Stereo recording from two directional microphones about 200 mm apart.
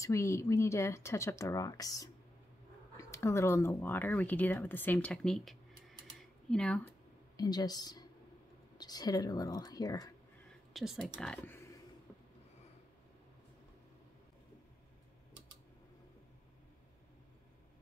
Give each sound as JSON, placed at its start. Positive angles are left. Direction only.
{"t": 0.0, "sound": "speech", "side_deg": 15}
{"t": 7.3, "sound": "speech", "side_deg": 20}
{"t": 10.7, "sound": "a woman's voice", "side_deg": 0}